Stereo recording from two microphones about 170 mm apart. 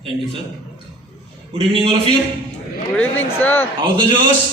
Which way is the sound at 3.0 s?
10° left (ahead or behind).